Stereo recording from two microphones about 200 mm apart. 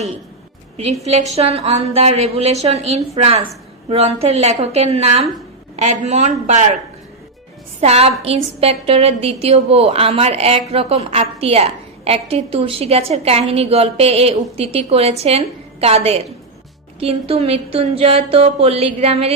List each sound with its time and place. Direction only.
1.3 s a woman's voice: 30° right (ahead or behind)
7.8 s a woman's voice: 30° right (ahead or behind)